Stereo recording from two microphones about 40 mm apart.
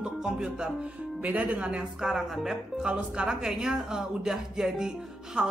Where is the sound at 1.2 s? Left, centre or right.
Right.